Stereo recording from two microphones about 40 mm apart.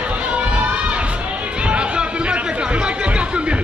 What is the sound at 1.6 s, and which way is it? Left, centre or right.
Chatter, right.